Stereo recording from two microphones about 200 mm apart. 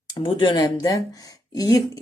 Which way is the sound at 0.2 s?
25° left (ahead or behind).